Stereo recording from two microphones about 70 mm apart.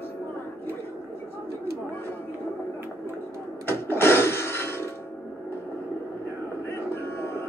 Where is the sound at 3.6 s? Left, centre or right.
Left.